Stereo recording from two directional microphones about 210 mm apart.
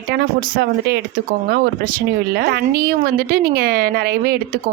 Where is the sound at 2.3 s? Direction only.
50° right (ahead or behind).